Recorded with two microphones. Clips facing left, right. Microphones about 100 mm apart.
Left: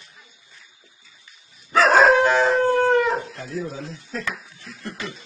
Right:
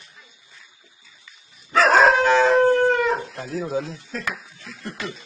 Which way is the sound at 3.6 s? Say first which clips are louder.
Right 5 dB; 85° right.